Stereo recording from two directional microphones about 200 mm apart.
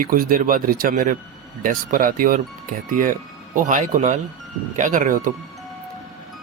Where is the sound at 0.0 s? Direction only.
45° right (ahead or behind).